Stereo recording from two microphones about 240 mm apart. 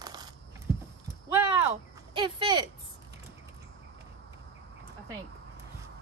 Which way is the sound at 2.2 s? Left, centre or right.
Centre.